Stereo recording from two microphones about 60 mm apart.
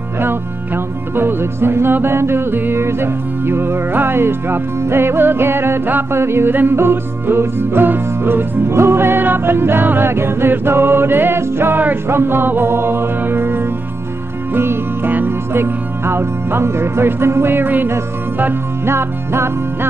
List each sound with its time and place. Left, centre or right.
1.1 s music: right